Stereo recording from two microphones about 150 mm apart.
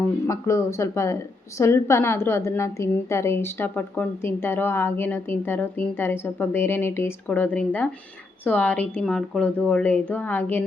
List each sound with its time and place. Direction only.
0.3 s a woman's voice: 20° left (ahead or behind)